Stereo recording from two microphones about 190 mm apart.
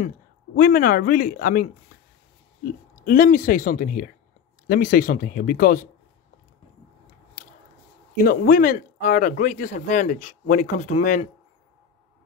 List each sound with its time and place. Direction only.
0.6 s speech: 45° left (ahead or behind)
8.2 s speech: 50° left (ahead or behind)